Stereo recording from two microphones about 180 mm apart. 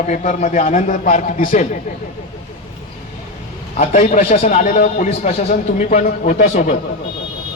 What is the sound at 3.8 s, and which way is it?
A man's voice, 40° left (ahead or behind).